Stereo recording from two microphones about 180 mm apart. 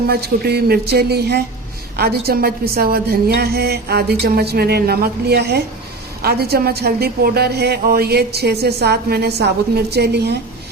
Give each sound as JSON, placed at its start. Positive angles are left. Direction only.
{"t": 0.1, "sound": "a woman's voice", "side_deg": -60}